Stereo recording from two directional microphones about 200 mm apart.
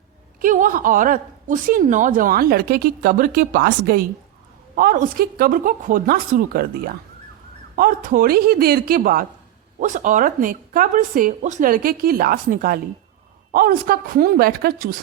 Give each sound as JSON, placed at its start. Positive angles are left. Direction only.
{"t": 0.4, "sound": "a woman's voice", "side_deg": -40}